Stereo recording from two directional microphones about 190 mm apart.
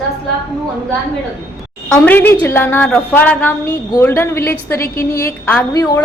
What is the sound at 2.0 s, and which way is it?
A woman's voice, 10° left (ahead or behind).